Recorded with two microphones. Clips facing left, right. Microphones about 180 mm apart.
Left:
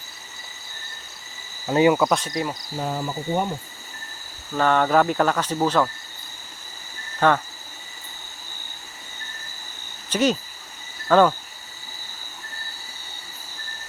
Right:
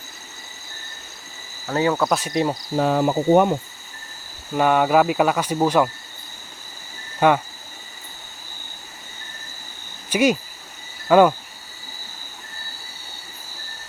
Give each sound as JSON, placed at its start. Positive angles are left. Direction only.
{"t": 1.6, "sound": "speech", "side_deg": 15}
{"t": 2.0, "sound": "speech", "side_deg": -5}
{"t": 2.3, "sound": "speech", "side_deg": -25}
{"t": 2.7, "sound": "speech", "side_deg": -75}
{"t": 4.5, "sound": "speech", "side_deg": -10}
{"t": 7.2, "sound": "speech", "side_deg": -10}
{"t": 10.1, "sound": "speech", "side_deg": -10}